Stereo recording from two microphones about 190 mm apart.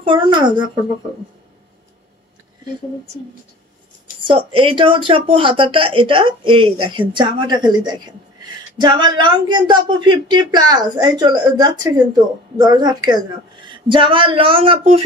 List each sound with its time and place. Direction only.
0.0 s speech: 25° right (ahead or behind)
4.3 s speech: 30° right (ahead or behind)